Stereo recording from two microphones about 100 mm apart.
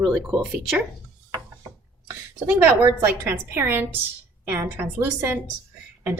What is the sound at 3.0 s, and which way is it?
A woman's voice, 20° right (ahead or behind).